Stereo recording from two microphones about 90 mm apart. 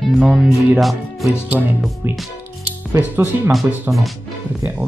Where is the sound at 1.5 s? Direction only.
15° right (ahead or behind).